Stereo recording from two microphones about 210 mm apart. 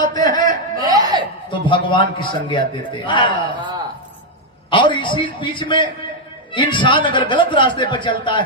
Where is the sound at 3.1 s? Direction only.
25° left (ahead or behind).